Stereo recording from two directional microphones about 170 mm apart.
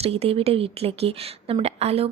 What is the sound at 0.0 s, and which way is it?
A woman's voice, 35° right (ahead or behind).